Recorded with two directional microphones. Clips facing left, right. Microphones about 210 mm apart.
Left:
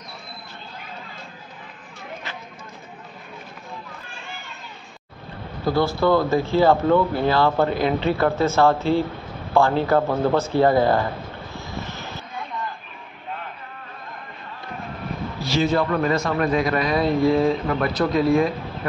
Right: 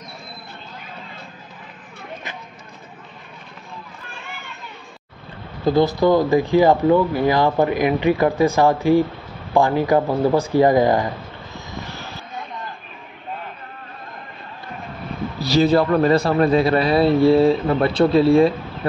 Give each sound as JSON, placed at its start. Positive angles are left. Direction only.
{"t": 5.7, "sound": "speech", "side_deg": -20}
{"t": 11.5, "sound": "vehicle", "side_deg": -20}
{"t": 15.4, "sound": "a man's voice", "side_deg": -35}